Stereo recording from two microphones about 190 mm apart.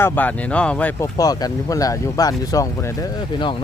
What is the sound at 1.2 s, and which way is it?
Speech, 20° left (ahead or behind).